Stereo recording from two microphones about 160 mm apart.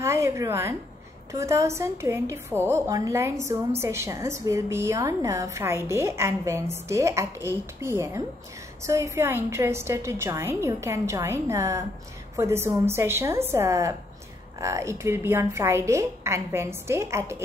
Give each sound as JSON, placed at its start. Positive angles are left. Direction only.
{"t": 0.0, "sound": "a woman's voice", "side_deg": -15}